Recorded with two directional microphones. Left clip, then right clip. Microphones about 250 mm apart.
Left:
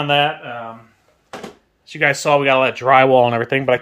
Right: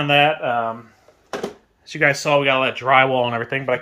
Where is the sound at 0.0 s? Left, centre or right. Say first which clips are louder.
Even; centre.